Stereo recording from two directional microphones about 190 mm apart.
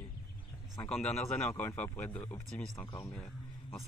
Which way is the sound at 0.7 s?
5° left (ahead or behind).